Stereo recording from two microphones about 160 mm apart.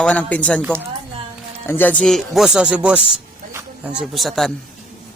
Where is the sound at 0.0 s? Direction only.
10° left (ahead or behind).